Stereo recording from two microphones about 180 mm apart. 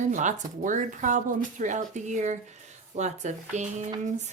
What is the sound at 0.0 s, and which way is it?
Speech, 40° right (ahead or behind).